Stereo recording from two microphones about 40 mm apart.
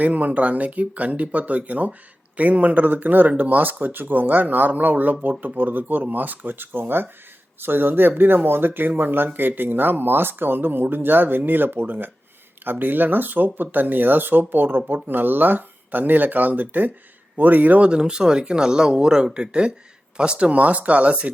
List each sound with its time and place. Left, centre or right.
0.0 s speech: right
17.8 s speech: right